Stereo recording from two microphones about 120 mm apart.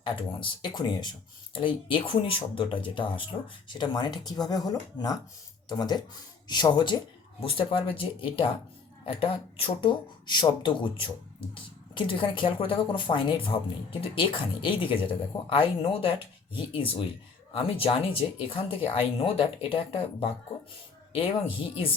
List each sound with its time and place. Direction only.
0.0 s speech: 40° left (ahead or behind)
10.2 s speech: 40° left (ahead or behind)